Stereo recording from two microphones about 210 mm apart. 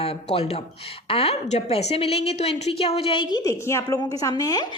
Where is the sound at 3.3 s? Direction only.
15° left (ahead or behind).